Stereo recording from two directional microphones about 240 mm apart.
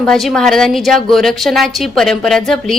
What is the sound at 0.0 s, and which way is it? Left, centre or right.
A woman's voice, centre.